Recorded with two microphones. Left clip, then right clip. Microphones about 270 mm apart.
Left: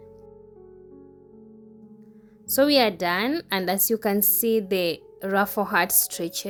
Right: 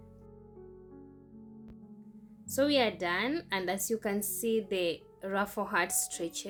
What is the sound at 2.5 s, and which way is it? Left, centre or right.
A woman's voice, left.